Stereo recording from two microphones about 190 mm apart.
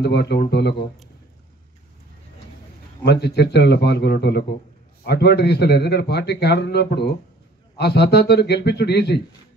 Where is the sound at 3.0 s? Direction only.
60° left (ahead or behind).